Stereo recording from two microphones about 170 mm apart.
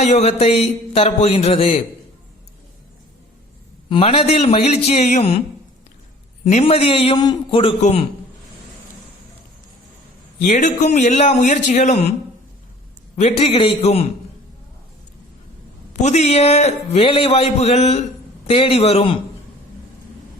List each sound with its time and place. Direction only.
0.0 s a man's voice: 40° left (ahead or behind)
3.8 s a man's voice: 30° left (ahead or behind)
6.4 s a man's voice: 40° left (ahead or behind)
10.4 s a man's voice: 45° left (ahead or behind)
13.1 s a man's voice: 35° left (ahead or behind)
15.9 s a man's voice: 40° left (ahead or behind)